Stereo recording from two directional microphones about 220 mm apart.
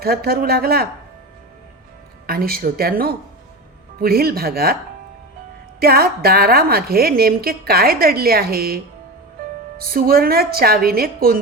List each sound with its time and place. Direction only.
0.0 s a woman's voice: 45° right (ahead or behind)
2.2 s a woman's voice: 45° right (ahead or behind)
5.8 s a woman's voice: 45° right (ahead or behind)